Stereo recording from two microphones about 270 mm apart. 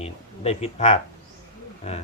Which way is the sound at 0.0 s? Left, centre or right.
Left.